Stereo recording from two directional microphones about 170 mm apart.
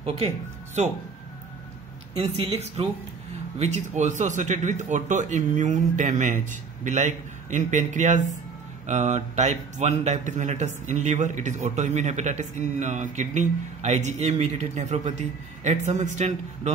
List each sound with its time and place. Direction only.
2.1 s a woman's voice: 35° right (ahead or behind)